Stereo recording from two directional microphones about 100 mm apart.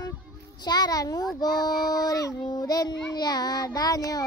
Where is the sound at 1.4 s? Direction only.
40° left (ahead or behind).